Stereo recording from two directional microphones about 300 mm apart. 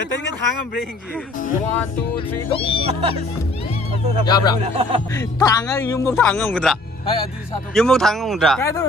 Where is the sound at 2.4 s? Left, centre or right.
Centre.